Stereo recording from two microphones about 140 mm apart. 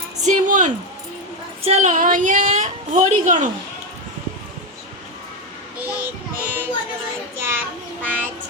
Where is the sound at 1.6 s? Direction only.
50° right (ahead or behind).